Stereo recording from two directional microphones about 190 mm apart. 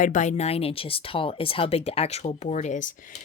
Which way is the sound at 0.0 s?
40° left (ahead or behind).